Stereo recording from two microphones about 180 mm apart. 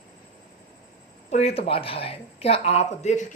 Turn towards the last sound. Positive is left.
turn(degrees=40)  # may be behind; listen again after turning